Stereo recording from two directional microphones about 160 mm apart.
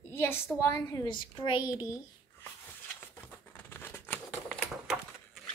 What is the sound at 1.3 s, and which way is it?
Speech, 30° left (ahead or behind).